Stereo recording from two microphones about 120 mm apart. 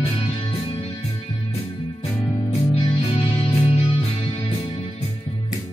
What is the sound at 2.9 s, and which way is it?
Music, 55° left (ahead or behind).